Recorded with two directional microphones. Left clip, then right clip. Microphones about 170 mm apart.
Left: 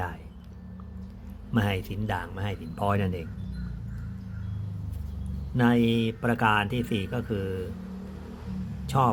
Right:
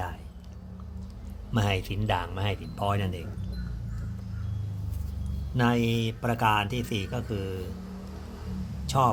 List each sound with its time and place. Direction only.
1.5 s speech: centre (ahead or behind)
2.7 s speech: 20° left (ahead or behind)
5.5 s speech: 5° left (ahead or behind)
8.9 s speech: 10° left (ahead or behind)